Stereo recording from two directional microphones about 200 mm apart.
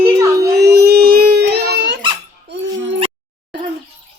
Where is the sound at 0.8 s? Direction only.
50° right (ahead or behind).